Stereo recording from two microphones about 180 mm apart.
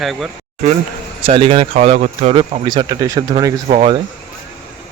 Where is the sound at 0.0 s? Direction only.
Centre (ahead or behind).